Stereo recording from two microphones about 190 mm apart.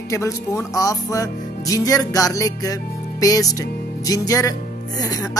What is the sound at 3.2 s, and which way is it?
Music, 20° left (ahead or behind).